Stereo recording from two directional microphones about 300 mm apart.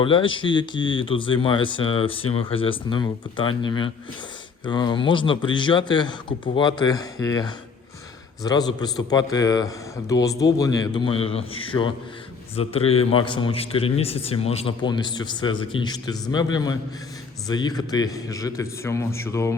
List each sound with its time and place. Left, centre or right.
0.0 s speech: centre